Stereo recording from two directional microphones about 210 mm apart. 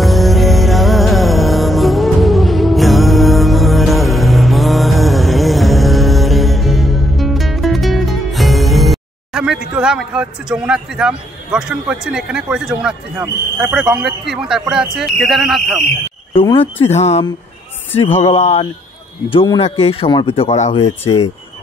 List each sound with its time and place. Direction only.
0.0 s music: centre (ahead or behind)
14.3 s a man's voice: 5° right (ahead or behind)
16.3 s speech: 25° left (ahead or behind)